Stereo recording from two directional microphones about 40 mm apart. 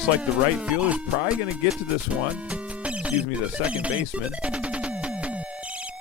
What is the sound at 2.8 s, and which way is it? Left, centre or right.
Speech, right.